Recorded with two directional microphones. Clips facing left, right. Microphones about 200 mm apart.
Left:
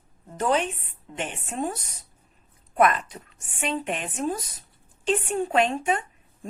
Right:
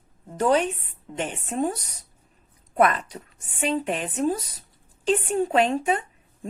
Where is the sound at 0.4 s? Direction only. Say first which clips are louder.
Right 3 dB; 40° right (ahead or behind).